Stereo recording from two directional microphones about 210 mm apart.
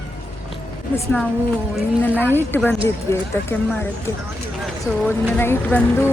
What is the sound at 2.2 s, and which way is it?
Speech, 10° left (ahead or behind).